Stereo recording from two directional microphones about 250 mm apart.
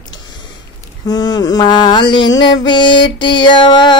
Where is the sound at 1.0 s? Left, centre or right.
Centre.